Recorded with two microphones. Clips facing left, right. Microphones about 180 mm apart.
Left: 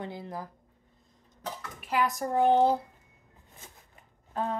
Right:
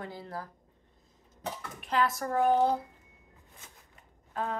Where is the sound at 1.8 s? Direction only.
10° left (ahead or behind); by 2.7 s 25° left (ahead or behind).